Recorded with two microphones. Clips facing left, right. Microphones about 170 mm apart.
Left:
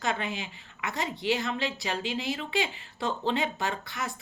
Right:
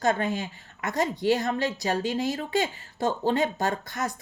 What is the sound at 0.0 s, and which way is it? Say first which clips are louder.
A woman's voice: right 6 dB; 45° right (ahead or behind).